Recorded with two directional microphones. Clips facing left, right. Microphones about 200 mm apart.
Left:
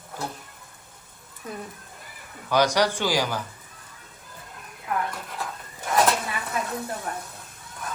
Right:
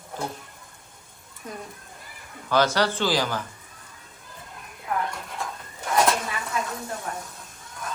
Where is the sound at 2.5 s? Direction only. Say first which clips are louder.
Left 1 dB; 15° left (ahead or behind).